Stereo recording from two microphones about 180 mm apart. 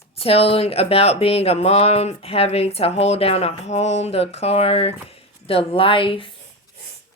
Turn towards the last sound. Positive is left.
turn(degrees=30)  # may be behind; listen again after turning